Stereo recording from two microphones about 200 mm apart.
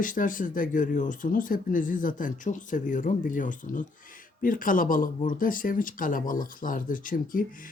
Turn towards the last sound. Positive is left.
turn(degrees=45)  # may be behind; listen again after turning